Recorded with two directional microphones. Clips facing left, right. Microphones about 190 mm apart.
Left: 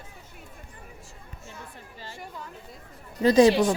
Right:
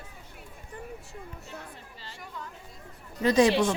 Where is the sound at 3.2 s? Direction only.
35° left (ahead or behind).